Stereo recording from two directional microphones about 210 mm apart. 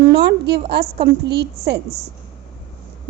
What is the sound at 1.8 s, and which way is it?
Speech, 30° right (ahead or behind).